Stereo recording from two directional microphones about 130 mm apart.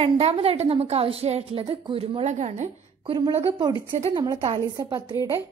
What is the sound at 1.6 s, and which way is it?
A woman's voice, 40° right (ahead or behind).